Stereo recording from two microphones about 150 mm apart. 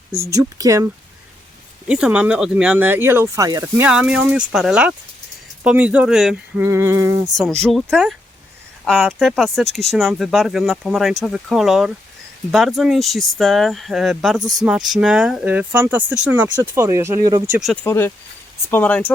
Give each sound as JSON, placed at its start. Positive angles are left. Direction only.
{"t": 0.3, "sound": "a sound", "side_deg": -20}
{"t": 1.9, "sound": "speech", "side_deg": -5}
{"t": 3.8, "sound": "speech", "side_deg": -5}
{"t": 6.6, "sound": "a sound", "side_deg": -15}
{"t": 7.6, "sound": "speech", "side_deg": 0}
{"t": 17.8, "sound": "speech", "side_deg": 15}